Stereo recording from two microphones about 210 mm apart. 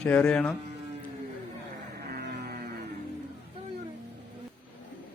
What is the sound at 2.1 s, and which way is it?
Music, 50° right (ahead or behind).